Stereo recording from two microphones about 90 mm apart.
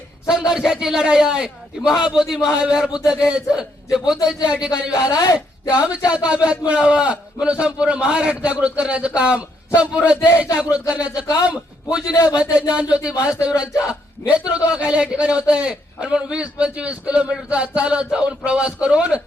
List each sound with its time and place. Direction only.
0.3 s a man's voice: 5° right (ahead or behind)
4.9 s speech: 45° left (ahead or behind)
6.1 s a man's voice: 15° right (ahead or behind)
14.3 s a man's voice: 10° right (ahead or behind)